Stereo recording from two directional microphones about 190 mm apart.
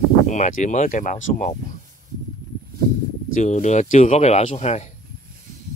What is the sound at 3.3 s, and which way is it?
Speech, 40° left (ahead or behind).